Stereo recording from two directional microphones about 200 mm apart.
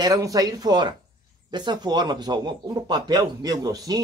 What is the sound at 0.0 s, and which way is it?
Speech, 20° right (ahead or behind).